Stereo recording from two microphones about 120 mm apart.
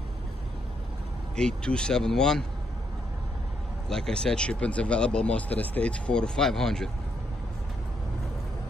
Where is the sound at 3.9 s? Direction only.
5° left (ahead or behind).